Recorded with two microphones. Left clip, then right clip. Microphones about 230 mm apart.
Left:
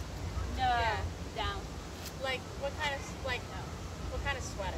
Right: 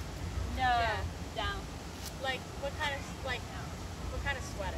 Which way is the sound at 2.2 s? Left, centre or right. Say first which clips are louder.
Left 1 dB; centre.